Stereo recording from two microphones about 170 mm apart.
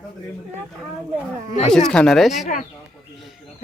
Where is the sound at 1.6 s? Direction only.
5° left (ahead or behind).